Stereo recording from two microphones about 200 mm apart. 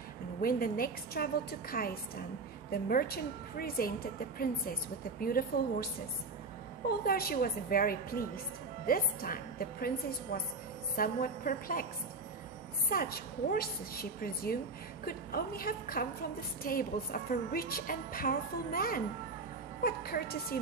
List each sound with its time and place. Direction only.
0.4 s a woman's voice: 45° left (ahead or behind)
2.9 s a woman's voice: 45° left (ahead or behind)
5.2 s a woman's voice: 45° left (ahead or behind)
6.9 s a woman's voice: 50° left (ahead or behind)
12.9 s a woman's voice: 45° left (ahead or behind)